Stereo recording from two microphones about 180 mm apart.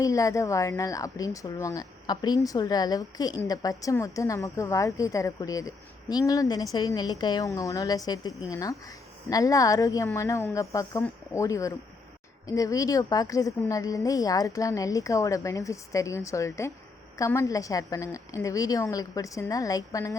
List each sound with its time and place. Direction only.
0.0 s a woman's voice: 20° left (ahead or behind)